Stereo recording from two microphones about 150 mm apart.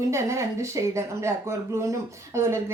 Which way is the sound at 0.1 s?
20° right (ahead or behind).